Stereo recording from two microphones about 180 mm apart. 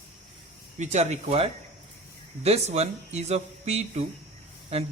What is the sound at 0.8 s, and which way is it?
Speech, 40° right (ahead or behind).